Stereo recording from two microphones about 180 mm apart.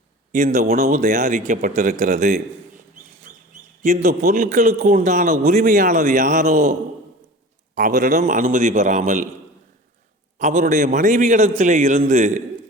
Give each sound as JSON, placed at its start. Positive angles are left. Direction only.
{"t": 0.3, "sound": "a man's voice", "side_deg": -45}
{"t": 3.3, "sound": "bird", "side_deg": -45}
{"t": 3.8, "sound": "a man's voice", "side_deg": -40}
{"t": 7.8, "sound": "a man's voice", "side_deg": -45}
{"t": 10.3, "sound": "a man's voice", "side_deg": -40}